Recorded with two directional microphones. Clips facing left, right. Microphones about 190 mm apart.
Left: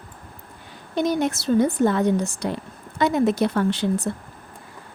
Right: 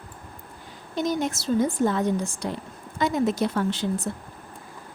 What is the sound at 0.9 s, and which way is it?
A woman's voice, 65° left (ahead or behind).